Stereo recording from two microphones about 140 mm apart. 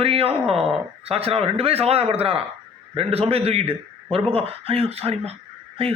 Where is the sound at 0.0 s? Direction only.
45° right (ahead or behind).